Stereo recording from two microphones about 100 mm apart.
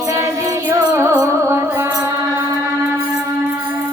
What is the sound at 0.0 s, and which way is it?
Music, 30° right (ahead or behind).